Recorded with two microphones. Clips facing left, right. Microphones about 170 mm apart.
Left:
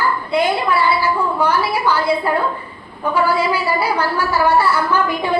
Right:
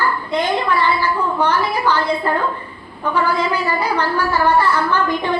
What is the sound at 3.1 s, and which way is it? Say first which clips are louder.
A woman's voice: left 2 dB; 10° left (ahead or behind).